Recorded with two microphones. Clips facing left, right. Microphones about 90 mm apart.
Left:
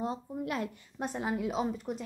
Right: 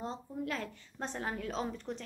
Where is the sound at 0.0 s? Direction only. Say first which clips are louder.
Left 4 dB; 15° left (ahead or behind).